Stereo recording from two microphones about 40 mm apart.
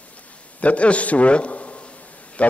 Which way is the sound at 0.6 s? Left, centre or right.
Left.